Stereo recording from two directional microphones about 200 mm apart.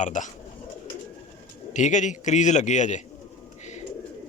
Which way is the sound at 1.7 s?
40° left (ahead or behind).